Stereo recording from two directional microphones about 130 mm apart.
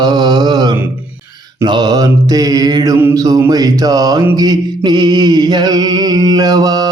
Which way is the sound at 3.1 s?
25° right (ahead or behind).